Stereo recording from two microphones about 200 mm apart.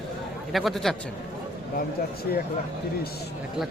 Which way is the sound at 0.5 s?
Centre (ahead or behind).